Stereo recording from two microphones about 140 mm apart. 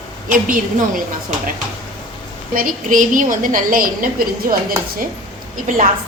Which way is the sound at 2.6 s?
75° right (ahead or behind).